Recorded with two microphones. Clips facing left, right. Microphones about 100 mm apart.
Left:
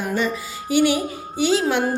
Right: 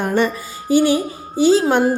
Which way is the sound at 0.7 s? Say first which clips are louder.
Right 3 dB; 35° right (ahead or behind).